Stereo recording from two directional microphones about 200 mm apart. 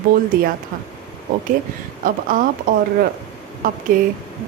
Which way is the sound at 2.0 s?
45° right (ahead or behind).